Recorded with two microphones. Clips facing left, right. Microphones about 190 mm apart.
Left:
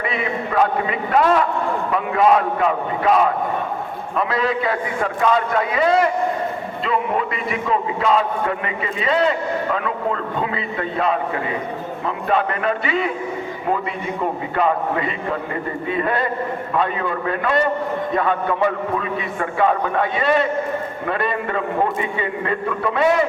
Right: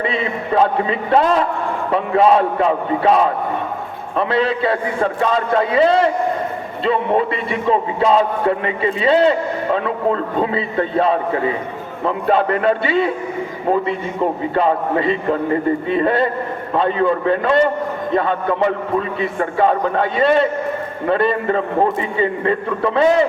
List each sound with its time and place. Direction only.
0.0 s a man's voice: 30° right (ahead or behind)
14.5 s a man's voice: 30° right (ahead or behind)